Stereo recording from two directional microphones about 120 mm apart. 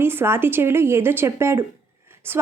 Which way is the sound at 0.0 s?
20° right (ahead or behind).